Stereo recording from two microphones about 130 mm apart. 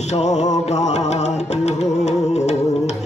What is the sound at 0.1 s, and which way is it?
Music, 60° left (ahead or behind).